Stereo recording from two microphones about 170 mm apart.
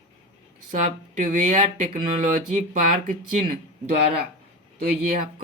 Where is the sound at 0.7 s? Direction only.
50° right (ahead or behind).